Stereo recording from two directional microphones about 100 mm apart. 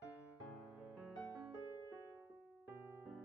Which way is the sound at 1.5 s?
30° right (ahead or behind).